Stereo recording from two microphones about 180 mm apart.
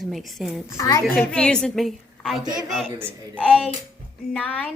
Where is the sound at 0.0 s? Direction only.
Centre (ahead or behind).